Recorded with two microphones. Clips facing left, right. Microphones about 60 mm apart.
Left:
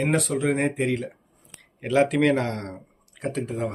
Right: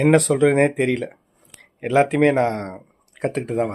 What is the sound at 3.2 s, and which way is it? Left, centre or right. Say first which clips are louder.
Speech: right 6 dB; right.